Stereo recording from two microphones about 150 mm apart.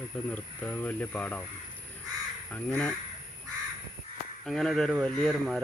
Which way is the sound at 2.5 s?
5° left (ahead or behind).